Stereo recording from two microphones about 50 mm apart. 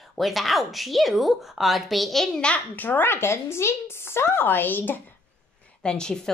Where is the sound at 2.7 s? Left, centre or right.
Left.